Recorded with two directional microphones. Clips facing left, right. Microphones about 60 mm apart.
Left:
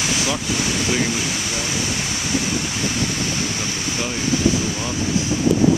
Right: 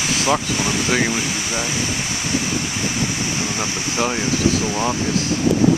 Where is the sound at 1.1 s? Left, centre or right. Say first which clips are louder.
Right 1 dB; centre.